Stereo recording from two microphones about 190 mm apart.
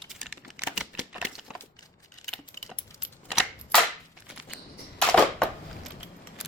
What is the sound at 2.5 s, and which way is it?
Keys jangling, 15° left (ahead or behind).